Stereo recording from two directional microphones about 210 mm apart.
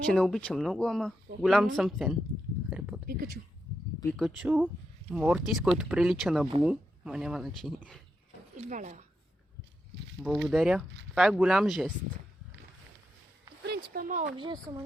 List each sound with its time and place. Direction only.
0.0 s speech: 5° left (ahead or behind)
3.1 s speech: 45° right (ahead or behind)
4.4 s speech: 5° right (ahead or behind)
8.5 s speech: 35° right (ahead or behind)
10.2 s speech: centre (ahead or behind)
13.6 s speech: 50° right (ahead or behind)
14.3 s a child's voice: 20° right (ahead or behind)